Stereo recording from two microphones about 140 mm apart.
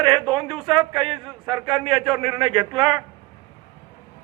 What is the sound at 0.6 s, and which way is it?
A man's voice, 35° right (ahead or behind).